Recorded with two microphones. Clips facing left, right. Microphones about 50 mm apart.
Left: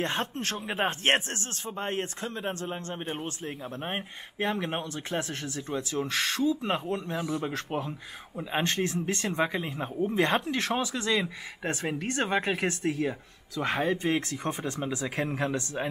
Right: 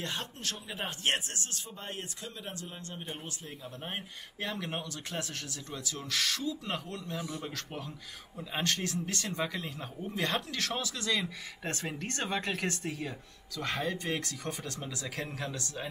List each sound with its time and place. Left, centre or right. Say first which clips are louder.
0.0 s speech: left 7 dB; left